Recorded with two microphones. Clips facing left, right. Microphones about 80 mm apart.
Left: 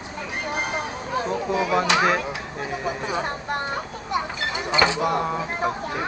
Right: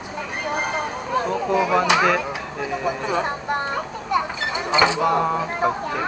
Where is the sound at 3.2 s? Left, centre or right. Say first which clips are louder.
Right 3 dB; centre.